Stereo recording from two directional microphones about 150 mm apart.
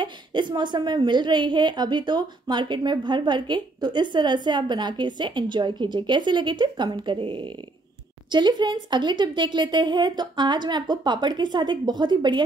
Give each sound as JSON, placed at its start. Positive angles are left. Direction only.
{"t": 0.0, "sound": "a woman's voice", "side_deg": -30}